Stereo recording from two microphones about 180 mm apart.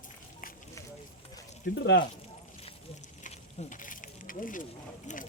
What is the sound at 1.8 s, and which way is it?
Speech, 70° left (ahead or behind).